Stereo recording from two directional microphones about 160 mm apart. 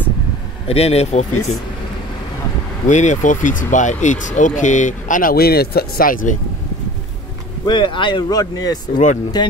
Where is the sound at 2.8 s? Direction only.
50° left (ahead or behind).